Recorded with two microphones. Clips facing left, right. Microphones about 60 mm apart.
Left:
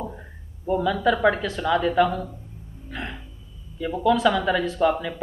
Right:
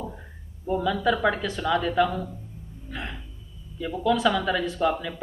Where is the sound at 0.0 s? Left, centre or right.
Centre.